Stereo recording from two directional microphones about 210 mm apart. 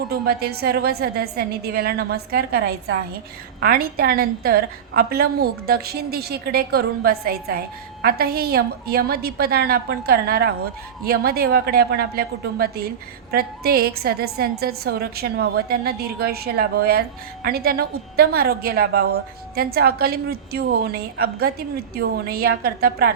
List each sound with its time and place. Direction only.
0.1 s a woman's voice: 50° right (ahead or behind)